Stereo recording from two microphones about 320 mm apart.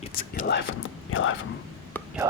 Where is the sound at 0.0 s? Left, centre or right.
Centre.